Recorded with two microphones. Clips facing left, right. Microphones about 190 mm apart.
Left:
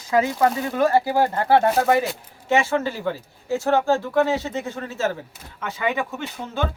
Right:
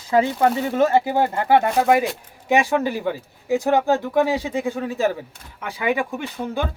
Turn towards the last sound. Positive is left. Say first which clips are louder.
# right 2 dB
turn(degrees=-15)  # may be behind; listen again after turning